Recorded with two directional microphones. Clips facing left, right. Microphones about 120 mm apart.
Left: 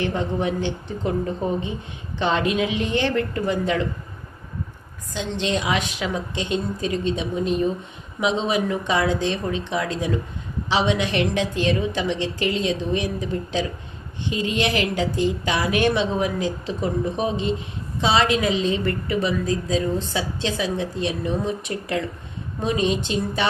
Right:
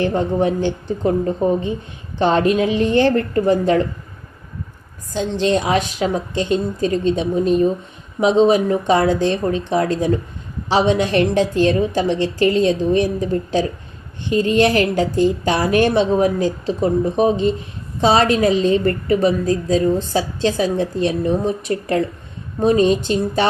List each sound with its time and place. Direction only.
0.0 s a woman's voice: 40° right (ahead or behind)
5.1 s a woman's voice: 40° right (ahead or behind)